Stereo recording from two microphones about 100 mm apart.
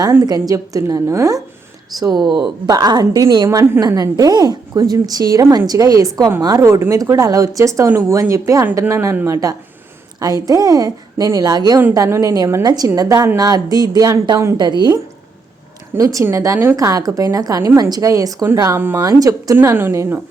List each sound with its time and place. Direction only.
0.0 s a woman's voice: 35° right (ahead or behind)
11.9 s a woman's voice: 30° right (ahead or behind)
12.6 s a woman's voice: 40° right (ahead or behind)
14.5 s a woman's voice: 50° right (ahead or behind)
16.0 s a woman's voice: 35° right (ahead or behind)
19.5 s a woman's voice: 20° right (ahead or behind)